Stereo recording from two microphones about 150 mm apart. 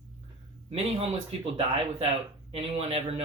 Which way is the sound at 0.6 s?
40° right (ahead or behind).